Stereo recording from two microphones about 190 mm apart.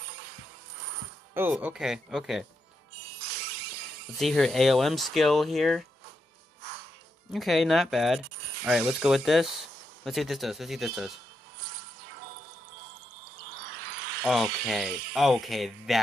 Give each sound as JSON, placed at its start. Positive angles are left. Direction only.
{"t": 1.3, "sound": "speech", "side_deg": -10}
{"t": 4.2, "sound": "speech", "side_deg": 0}
{"t": 7.3, "sound": "speech", "side_deg": 0}
{"t": 13.8, "sound": "a sound", "side_deg": -60}
{"t": 14.2, "sound": "speech", "side_deg": -5}